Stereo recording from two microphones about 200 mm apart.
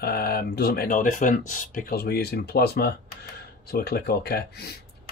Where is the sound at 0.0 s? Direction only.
50° left (ahead or behind).